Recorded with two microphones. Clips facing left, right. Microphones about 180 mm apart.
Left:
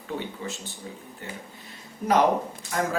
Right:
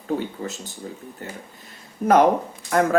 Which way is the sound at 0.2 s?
40° right (ahead or behind).